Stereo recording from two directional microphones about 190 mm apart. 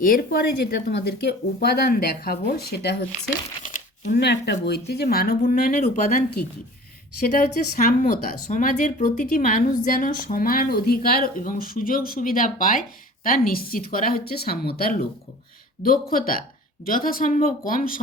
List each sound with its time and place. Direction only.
0.0 s speech: 50° left (ahead or behind)
3.6 s crumpling: 40° left (ahead or behind)
4.1 s speech: 60° left (ahead or behind)
5.7 s speech: 40° left (ahead or behind)
7.3 s speech: 40° left (ahead or behind)